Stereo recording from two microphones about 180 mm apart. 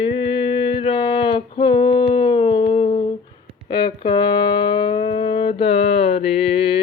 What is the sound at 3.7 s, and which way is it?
Music, 25° left (ahead or behind).